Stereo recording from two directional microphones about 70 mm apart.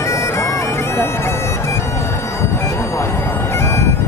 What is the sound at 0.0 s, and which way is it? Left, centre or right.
Bagpipes, left.